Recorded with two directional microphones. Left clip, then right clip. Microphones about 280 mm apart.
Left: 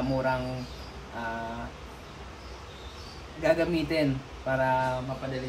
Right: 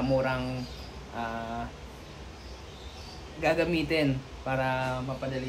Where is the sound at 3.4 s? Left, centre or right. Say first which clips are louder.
Left 1 dB; centre.